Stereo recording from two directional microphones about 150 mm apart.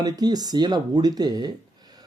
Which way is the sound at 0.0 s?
25° right (ahead or behind).